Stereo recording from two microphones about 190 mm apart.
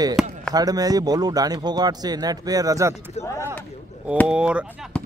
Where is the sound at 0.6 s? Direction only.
20° right (ahead or behind).